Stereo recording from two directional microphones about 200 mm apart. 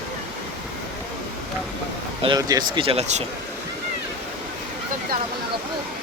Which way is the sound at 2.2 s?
20° right (ahead or behind).